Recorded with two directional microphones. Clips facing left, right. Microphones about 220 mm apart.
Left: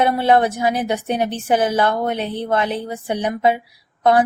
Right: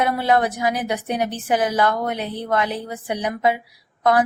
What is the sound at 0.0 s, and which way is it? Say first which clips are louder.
A woman's voice: left 3 dB; 25° left (ahead or behind).